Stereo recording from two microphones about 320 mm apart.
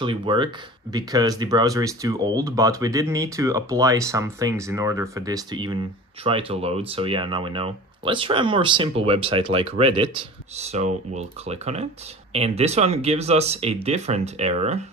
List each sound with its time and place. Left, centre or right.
0.0 s speech: centre